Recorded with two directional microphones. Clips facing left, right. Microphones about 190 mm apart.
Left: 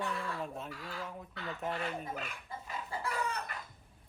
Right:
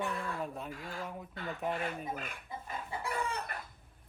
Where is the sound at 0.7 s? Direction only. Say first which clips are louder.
Right 1 dB; 50° right (ahead or behind).